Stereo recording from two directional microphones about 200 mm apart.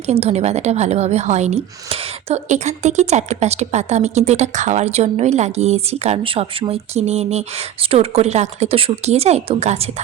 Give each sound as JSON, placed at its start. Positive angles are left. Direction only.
{"t": 0.0, "sound": "a woman's voice", "side_deg": -30}